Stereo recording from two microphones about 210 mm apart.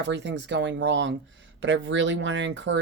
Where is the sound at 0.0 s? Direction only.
55° right (ahead or behind).